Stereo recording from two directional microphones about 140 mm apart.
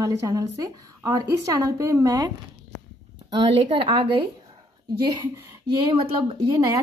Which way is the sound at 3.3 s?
40° right (ahead or behind).